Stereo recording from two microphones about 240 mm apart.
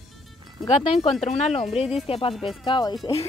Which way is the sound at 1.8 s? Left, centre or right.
Left.